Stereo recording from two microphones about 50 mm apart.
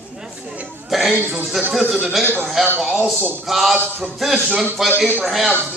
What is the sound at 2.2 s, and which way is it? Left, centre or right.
Speech, left.